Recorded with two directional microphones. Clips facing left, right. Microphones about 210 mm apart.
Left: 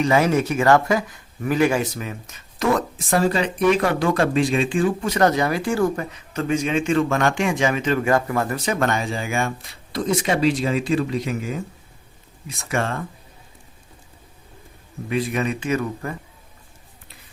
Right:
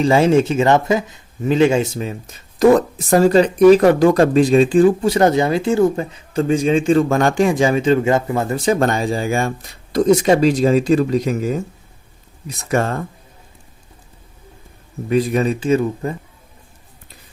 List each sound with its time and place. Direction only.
0.0 s speech: 30° right (ahead or behind)
15.1 s speech: 35° right (ahead or behind)